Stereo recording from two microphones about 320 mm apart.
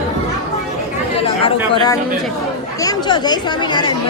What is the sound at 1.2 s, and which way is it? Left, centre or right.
Chatter, centre.